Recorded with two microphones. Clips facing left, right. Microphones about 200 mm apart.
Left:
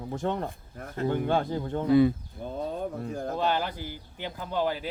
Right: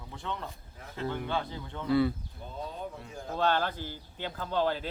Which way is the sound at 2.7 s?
50° left (ahead or behind).